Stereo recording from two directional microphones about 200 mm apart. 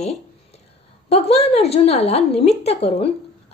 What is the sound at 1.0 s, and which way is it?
A woman's voice, 30° left (ahead or behind).